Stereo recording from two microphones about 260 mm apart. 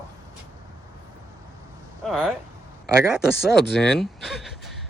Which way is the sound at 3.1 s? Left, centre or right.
Centre.